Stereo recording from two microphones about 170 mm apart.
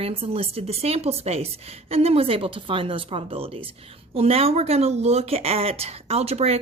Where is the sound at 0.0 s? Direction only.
35° right (ahead or behind).